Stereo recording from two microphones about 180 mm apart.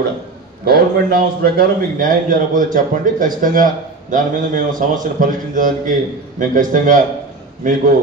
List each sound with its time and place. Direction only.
0.7 s a man's voice: 55° right (ahead or behind)